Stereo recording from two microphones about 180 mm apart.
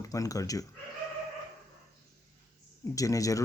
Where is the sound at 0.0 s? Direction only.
20° left (ahead or behind).